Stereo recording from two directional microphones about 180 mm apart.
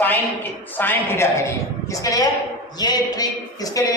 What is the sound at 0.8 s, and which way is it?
A woman's voice, 10° left (ahead or behind).